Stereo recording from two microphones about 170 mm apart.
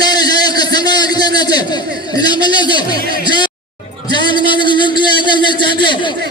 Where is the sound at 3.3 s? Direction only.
25° left (ahead or behind).